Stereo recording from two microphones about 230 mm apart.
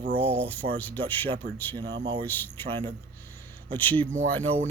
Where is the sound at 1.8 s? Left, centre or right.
Right.